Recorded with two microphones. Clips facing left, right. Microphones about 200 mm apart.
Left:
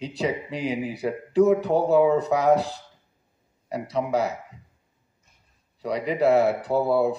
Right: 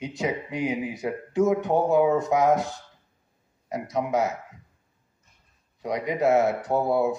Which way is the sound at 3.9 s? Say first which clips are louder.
Even; 35° left (ahead or behind).